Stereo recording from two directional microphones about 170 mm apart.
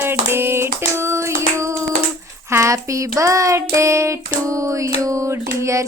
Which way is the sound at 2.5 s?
15° right (ahead or behind).